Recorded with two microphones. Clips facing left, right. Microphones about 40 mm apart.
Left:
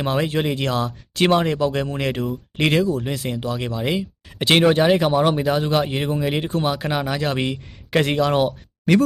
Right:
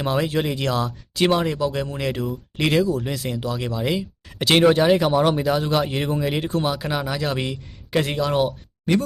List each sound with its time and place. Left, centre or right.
0.0 s speech: left
1.1 s speech: left
1.9 s speech: left
7.9 s speech: left